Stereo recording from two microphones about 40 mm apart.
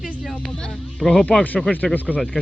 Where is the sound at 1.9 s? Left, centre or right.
Left.